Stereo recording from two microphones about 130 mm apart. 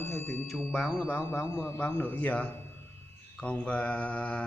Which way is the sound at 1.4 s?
20° left (ahead or behind).